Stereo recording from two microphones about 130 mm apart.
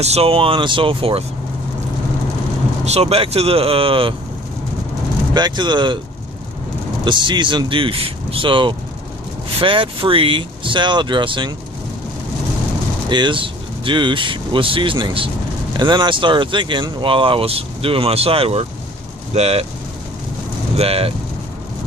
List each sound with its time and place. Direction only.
0.0 s speech: 50° right (ahead or behind)
2.8 s speech: 55° right (ahead or behind)
5.3 s speech: 35° right (ahead or behind)
7.0 s speech: 40° right (ahead or behind)
13.1 s speech: 35° right (ahead or behind); by 19.6 s 55° right (ahead or behind)
20.7 s speech: 50° right (ahead or behind)